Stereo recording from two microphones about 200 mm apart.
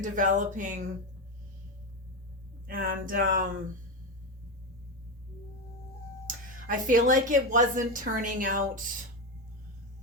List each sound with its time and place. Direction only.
0.0 s a woman's voice: 40° right (ahead or behind)
2.6 s a sound: 45° right (ahead or behind)
6.7 s a woman's voice: 40° right (ahead or behind)